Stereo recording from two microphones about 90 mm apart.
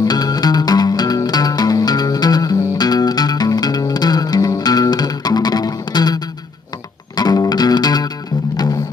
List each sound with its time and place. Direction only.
0.0 s music: 45° left (ahead or behind)